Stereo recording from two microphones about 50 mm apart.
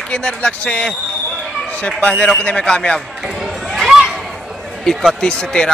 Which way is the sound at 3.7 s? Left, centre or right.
Centre.